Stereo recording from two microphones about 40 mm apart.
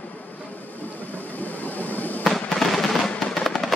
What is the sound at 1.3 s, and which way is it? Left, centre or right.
Vehicle, left.